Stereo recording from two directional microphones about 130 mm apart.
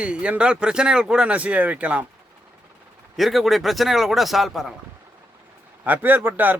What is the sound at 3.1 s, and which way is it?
Speech, centre (ahead or behind).